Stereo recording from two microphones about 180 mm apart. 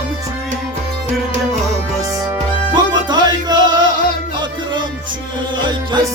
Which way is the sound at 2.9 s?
25° right (ahead or behind).